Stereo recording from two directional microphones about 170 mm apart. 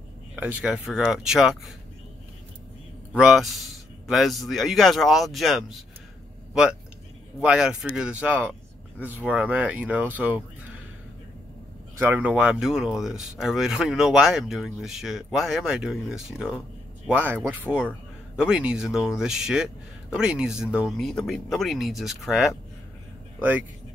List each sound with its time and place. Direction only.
0.4 s speech: 10° right (ahead or behind)
3.2 s speech: centre (ahead or behind)
7.3 s speech: 5° right (ahead or behind)
12.0 s speech: 10° right (ahead or behind)